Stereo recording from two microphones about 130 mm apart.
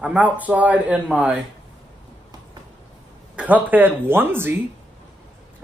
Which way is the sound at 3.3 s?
10° right (ahead or behind).